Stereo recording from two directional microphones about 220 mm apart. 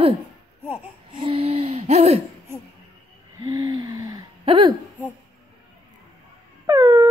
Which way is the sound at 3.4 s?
20° right (ahead or behind).